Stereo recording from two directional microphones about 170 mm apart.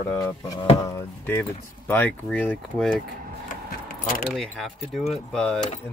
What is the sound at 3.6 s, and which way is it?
Keys jangling, 55° left (ahead or behind).